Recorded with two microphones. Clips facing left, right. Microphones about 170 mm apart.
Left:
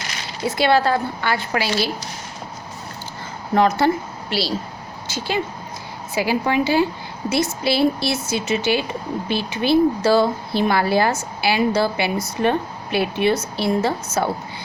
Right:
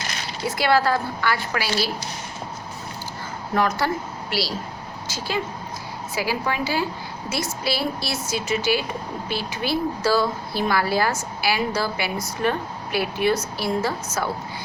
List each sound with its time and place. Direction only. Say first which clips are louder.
0.4 s a woman's voice: left 3 dB; 25° left (ahead or behind)
3.5 s a woman's voice: left 6 dB; 20° left (ahead or behind)